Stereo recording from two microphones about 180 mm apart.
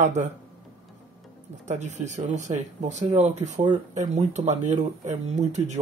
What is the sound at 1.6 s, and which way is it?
Speech, 40° right (ahead or behind).